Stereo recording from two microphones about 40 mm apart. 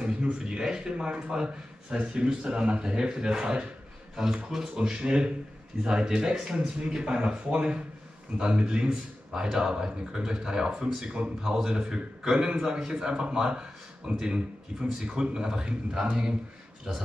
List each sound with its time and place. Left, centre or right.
0.0 s a man's voice: right
5.0 s a man's voice: right